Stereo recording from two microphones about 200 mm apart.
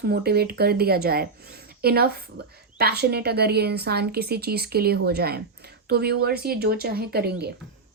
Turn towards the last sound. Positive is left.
turn(degrees=-55)  # may be behind; listen again after turning